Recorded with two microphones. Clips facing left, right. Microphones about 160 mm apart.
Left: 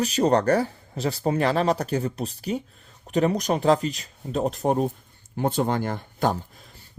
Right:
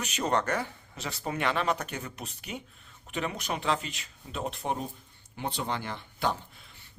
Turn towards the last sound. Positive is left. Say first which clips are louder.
# left 7 dB
turn(degrees=45)  # may be behind; listen again after turning